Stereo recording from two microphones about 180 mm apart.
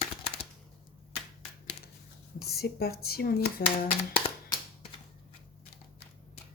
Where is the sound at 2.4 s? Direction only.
60° left (ahead or behind).